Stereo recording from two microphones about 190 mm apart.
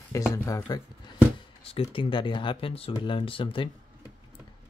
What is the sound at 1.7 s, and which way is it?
Speech, 30° left (ahead or behind).